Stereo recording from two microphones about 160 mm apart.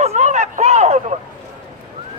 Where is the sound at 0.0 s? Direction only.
45° right (ahead or behind).